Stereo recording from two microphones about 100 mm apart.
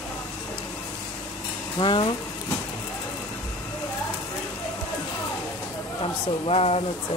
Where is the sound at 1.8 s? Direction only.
55° left (ahead or behind).